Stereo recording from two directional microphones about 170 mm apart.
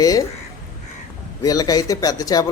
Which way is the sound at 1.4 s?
20° left (ahead or behind).